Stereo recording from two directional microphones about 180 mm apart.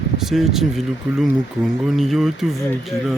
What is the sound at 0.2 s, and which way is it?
Speech, centre (ahead or behind).